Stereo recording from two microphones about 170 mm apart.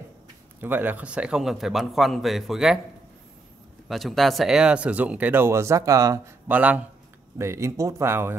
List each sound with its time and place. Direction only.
0.6 s a man's voice: 10° right (ahead or behind)
3.9 s speech: centre (ahead or behind); by 6.5 s 20° right (ahead or behind)
6.5 s speech: 10° right (ahead or behind)